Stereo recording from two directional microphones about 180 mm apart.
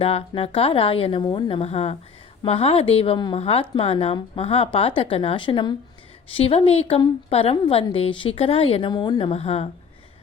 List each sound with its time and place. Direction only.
0.0 s a woman's voice: 30° left (ahead or behind)